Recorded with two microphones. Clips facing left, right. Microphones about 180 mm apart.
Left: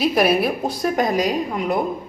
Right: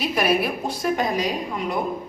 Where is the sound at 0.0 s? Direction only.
40° left (ahead or behind).